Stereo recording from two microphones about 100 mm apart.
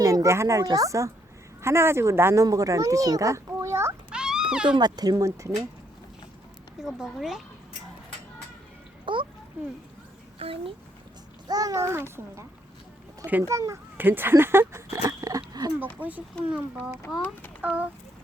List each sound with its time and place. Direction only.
0.0 s speech: 35° right (ahead or behind)
4.1 s music: 5° right (ahead or behind)
4.5 s speech: 10° right (ahead or behind)
4.8 s speech: 40° right (ahead or behind)
6.7 s speech: 5° right (ahead or behind)
9.1 s a sound: 55° right (ahead or behind)
9.6 s speech: 20° right (ahead or behind)
10.3 s a child's voice: 75° right (ahead or behind)
11.4 s speech: 40° right (ahead or behind)
13.5 s speech: 30° right (ahead or behind)
13.9 s speech: 20° right (ahead or behind)
15.2 s dog: 35° right (ahead or behind)
16.0 s speech: 15° right (ahead or behind)